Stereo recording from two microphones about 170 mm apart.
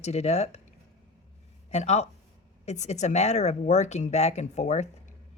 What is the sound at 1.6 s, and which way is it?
Speech, 40° left (ahead or behind).